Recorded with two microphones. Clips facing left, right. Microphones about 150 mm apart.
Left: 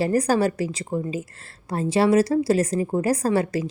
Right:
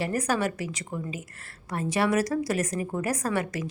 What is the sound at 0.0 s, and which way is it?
A woman's voice, 35° left (ahead or behind).